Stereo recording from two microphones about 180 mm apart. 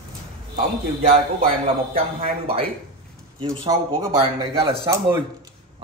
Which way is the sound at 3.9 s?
30° right (ahead or behind).